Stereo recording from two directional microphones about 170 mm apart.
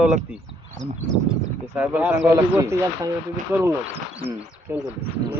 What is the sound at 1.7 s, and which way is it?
A man's voice, 10° right (ahead or behind).